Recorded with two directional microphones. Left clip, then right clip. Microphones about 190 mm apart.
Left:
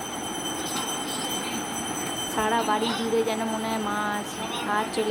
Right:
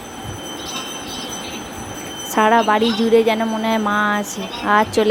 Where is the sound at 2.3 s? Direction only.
35° right (ahead or behind).